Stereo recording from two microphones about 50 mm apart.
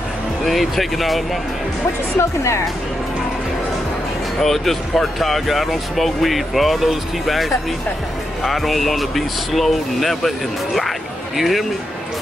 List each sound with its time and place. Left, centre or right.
0.5 s speech: centre
2.1 s speech: left
4.4 s speech: centre